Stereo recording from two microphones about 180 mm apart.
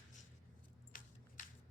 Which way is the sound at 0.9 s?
50° left (ahead or behind).